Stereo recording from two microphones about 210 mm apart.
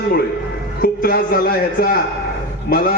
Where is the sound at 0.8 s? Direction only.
45° left (ahead or behind).